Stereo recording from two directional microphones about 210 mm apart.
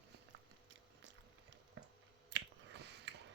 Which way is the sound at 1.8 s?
65° right (ahead or behind).